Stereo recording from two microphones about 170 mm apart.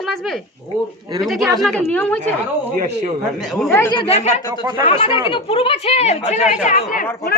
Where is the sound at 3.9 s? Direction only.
35° left (ahead or behind); by 7.1 s 50° left (ahead or behind).